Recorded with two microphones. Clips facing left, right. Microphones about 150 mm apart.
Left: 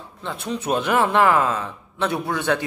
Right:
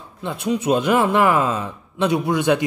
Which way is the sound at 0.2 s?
15° right (ahead or behind).